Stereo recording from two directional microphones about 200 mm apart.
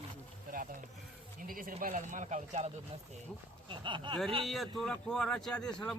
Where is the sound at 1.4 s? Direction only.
45° right (ahead or behind).